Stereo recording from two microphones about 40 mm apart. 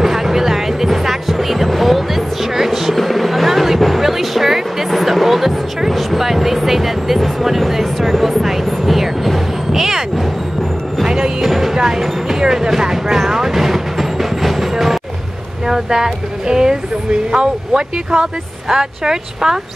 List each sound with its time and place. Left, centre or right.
0.0 s music: centre
11.1 s music: centre
11.5 s a sound: centre
15.6 s speech: centre